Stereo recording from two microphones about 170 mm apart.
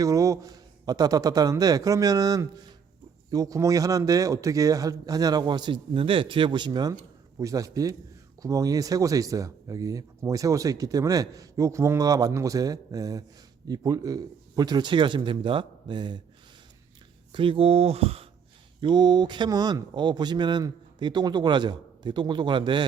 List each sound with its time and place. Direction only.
0.0 s speech: 20° right (ahead or behind)
17.3 s speech: 30° right (ahead or behind)